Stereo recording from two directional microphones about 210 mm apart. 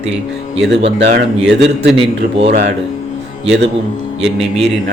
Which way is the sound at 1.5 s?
55° right (ahead or behind).